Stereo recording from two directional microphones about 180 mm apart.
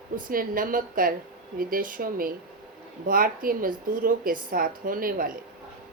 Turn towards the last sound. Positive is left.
turn(degrees=-55)  # may be behind; listen again after turning